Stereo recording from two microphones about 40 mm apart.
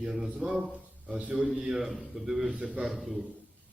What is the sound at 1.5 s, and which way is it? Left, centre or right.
A man's voice, centre.